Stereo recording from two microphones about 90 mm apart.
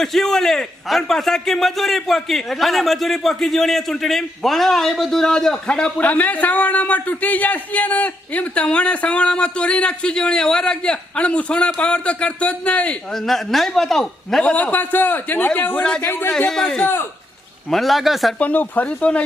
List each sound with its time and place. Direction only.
0.0 s a man's voice: 5° left (ahead or behind)
13.1 s a man's voice: 5° left (ahead or behind)
14.5 s a man's voice: 15° left (ahead or behind)
16.8 s a man's voice: 25° left (ahead or behind)
17.7 s a man's voice: centre (ahead or behind)
18.3 s a man's voice: 20° left (ahead or behind)